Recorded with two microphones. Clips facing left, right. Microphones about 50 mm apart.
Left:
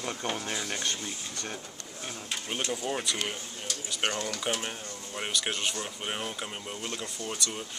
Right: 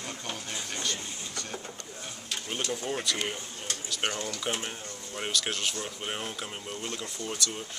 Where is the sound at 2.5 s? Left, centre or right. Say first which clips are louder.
Even; centre.